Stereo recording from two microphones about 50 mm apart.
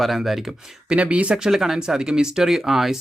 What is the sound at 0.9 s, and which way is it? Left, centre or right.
Speech, right.